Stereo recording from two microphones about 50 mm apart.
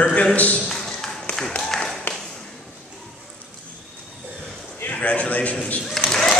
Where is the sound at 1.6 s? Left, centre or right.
Centre.